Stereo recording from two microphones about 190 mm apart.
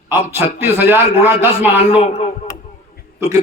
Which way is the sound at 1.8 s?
30° left (ahead or behind).